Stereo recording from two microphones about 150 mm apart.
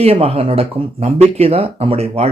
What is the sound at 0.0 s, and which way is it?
Speech, 40° right (ahead or behind).